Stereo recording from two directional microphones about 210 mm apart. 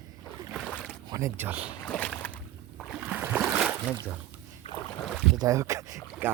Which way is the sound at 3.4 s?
5° right (ahead or behind).